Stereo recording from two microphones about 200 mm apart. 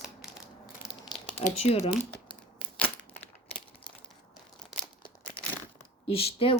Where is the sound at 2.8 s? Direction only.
10° left (ahead or behind).